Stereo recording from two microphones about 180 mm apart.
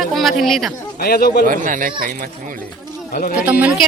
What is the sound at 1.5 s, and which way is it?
Speech, 50° right (ahead or behind).